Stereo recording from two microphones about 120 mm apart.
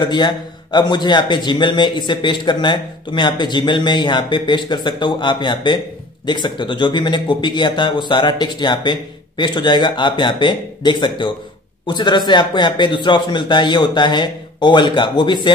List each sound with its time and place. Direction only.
0.0 s a man's voice: 40° left (ahead or behind)